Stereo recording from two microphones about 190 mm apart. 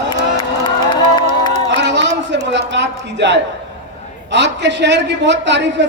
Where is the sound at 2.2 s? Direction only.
70° right (ahead or behind).